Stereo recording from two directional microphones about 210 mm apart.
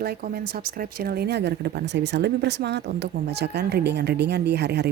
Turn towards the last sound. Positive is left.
turn(degrees=-50)  # may be behind; listen again after turning